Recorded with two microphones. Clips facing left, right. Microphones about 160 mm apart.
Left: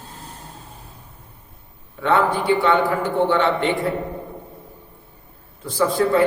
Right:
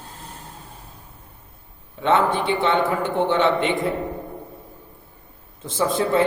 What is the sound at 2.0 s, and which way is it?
A man's voice, 20° right (ahead or behind).